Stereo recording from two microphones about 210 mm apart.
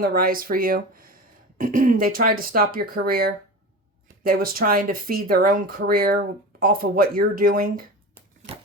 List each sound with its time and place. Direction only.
0.0 s speech: 45° right (ahead or behind)